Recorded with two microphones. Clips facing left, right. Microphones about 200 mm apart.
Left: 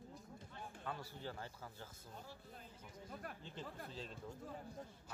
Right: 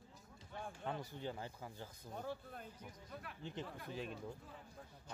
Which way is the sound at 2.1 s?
60° right (ahead or behind).